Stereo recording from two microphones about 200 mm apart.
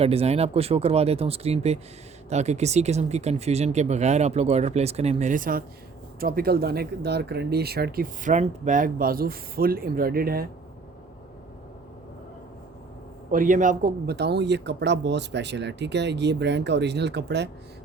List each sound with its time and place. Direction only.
0.0 s speech: 30° right (ahead or behind); by 10.4 s 50° right (ahead or behind)
13.3 s speech: 40° right (ahead or behind); by 17.5 s 60° right (ahead or behind)